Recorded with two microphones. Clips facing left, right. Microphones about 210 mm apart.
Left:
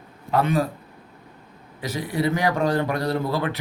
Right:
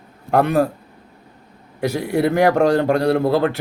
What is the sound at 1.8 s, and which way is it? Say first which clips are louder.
A man's voice: right 6 dB; 65° right (ahead or behind).